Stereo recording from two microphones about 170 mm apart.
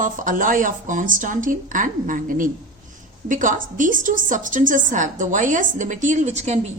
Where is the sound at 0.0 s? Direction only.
50° right (ahead or behind).